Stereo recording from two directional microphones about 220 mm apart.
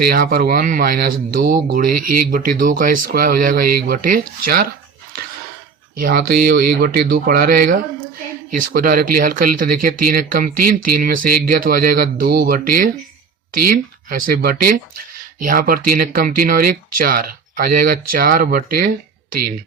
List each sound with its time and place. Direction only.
0.0 s speech: 40° right (ahead or behind)
6.0 s speech: 40° right (ahead or behind)